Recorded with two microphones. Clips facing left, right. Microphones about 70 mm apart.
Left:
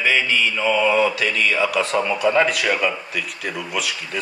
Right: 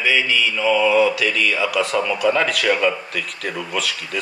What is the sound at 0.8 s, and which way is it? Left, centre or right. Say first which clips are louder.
A man's voice: right 2 dB; left.